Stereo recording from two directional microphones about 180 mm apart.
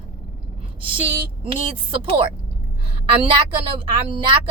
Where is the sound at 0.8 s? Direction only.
30° right (ahead or behind).